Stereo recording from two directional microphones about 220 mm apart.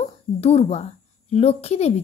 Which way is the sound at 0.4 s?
25° left (ahead or behind).